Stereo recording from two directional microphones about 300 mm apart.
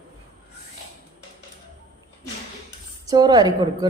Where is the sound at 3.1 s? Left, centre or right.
Centre.